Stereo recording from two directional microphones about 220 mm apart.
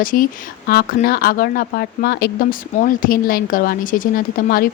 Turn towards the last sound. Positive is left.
turn(degrees=40)  # may be behind; listen again after turning